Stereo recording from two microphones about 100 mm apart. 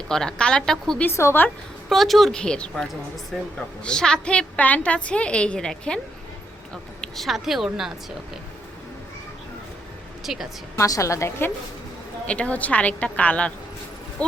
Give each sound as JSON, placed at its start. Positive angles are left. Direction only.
{"t": 0.1, "sound": "a woman's voice", "side_deg": 5}
{"t": 1.0, "sound": "speech", "side_deg": 25}
{"t": 1.9, "sound": "a woman's voice", "side_deg": 0}
{"t": 7.0, "sound": "a woman's voice", "side_deg": 0}
{"t": 10.3, "sound": "a woman's voice", "side_deg": -5}
{"t": 10.8, "sound": "a woman's voice", "side_deg": 35}
{"t": 12.2, "sound": "a woman's voice", "side_deg": 10}